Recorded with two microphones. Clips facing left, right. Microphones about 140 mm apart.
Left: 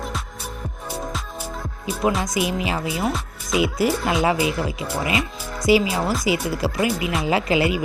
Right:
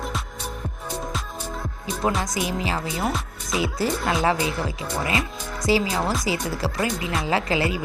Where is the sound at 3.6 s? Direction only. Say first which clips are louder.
Left 4 dB; 15° left (ahead or behind).